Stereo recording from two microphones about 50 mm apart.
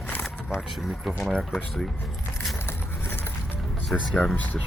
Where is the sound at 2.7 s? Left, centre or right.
Left.